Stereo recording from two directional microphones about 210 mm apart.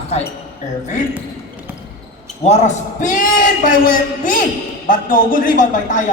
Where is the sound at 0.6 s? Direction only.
35° left (ahead or behind).